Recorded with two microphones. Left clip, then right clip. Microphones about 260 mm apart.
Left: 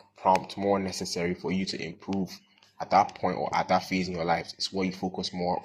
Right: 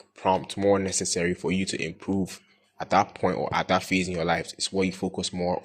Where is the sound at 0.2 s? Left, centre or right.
Right.